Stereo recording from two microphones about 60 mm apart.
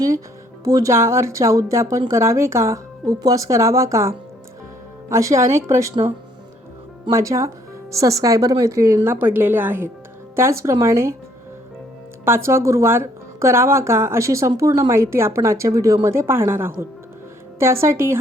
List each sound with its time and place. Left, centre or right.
0.6 s speech: right
0.9 s a woman's voice: right
7.1 s a woman's voice: right
9.0 s a woman's voice: right
10.3 s speech: right
12.2 s speech: right